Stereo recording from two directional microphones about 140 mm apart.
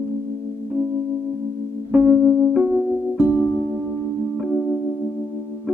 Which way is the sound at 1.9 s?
15° right (ahead or behind).